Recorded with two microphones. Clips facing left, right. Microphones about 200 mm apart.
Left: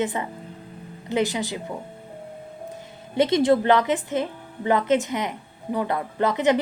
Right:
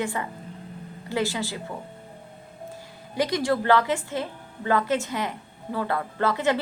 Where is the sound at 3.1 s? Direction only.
25° left (ahead or behind).